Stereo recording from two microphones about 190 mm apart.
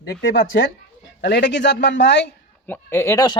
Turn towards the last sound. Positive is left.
turn(degrees=15)  # may be behind; listen again after turning